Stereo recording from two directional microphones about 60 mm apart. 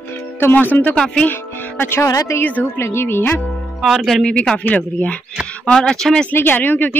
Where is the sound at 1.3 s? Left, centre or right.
Left.